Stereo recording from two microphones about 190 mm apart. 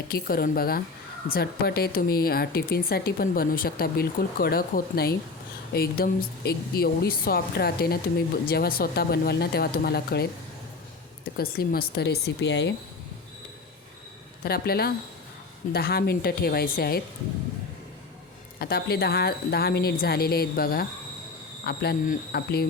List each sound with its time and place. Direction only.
0.1 s a woman's voice: 50° left (ahead or behind)
11.3 s a woman's voice: 55° left (ahead or behind)
14.4 s a woman's voice: 55° left (ahead or behind)
18.6 s a woman's voice: 55° left (ahead or behind)